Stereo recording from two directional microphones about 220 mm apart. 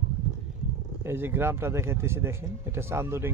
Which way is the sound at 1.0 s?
10° right (ahead or behind).